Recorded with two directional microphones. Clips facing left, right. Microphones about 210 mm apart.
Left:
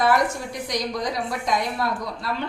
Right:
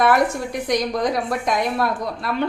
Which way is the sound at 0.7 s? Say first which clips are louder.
Right 6 dB; 55° right (ahead or behind).